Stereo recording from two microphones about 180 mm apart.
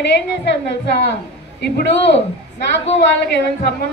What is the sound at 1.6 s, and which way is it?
Speech, 70° left (ahead or behind).